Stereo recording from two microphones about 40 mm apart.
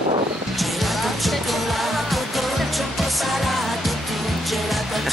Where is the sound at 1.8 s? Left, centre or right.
Centre.